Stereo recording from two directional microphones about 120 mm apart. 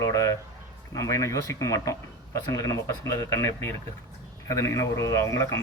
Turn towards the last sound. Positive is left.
turn(degrees=25)  # may be behind; listen again after turning